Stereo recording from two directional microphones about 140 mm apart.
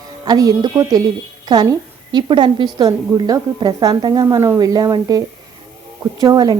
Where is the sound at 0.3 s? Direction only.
25° right (ahead or behind).